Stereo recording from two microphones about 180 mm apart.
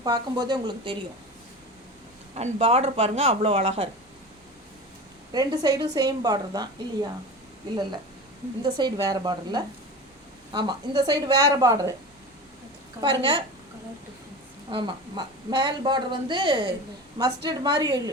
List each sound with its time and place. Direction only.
0.0 s a woman's voice: 20° right (ahead or behind)
2.3 s speech: 35° right (ahead or behind)
5.3 s a woman's voice: 20° right (ahead or behind)
8.6 s a woman's voice: 20° right (ahead or behind)
13.0 s a woman's voice: 25° right (ahead or behind)
14.7 s a woman's voice: 25° right (ahead or behind)